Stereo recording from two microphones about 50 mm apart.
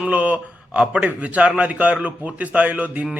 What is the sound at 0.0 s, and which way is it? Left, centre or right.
A man's voice, right.